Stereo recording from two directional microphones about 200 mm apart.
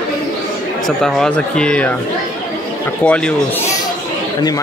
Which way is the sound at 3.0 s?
5° left (ahead or behind).